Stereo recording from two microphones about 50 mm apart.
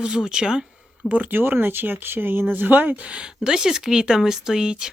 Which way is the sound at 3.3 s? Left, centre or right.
Centre.